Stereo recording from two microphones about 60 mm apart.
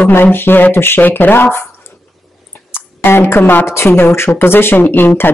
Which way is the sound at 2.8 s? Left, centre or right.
Left.